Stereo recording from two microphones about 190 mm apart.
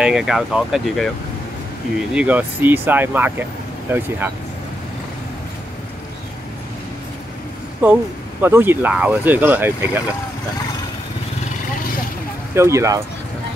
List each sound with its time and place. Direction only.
0.0 s speech: 5° right (ahead or behind)
2.1 s speech: 10° right (ahead or behind)
7.8 s speech: 10° right (ahead or behind)
12.5 s speech: 15° right (ahead or behind)